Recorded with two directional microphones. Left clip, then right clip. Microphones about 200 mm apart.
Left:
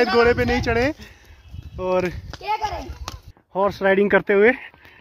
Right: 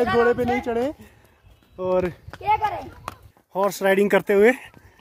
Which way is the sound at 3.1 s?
15° right (ahead or behind).